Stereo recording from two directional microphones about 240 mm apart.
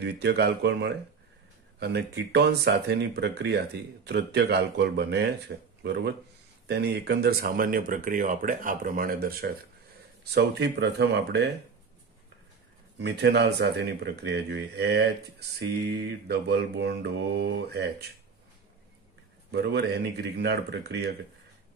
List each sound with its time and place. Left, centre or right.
0.0 s speech: right
13.0 s speech: right
19.5 s speech: right